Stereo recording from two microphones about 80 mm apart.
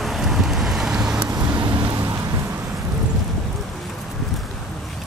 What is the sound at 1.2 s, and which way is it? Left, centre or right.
Vehicle, right.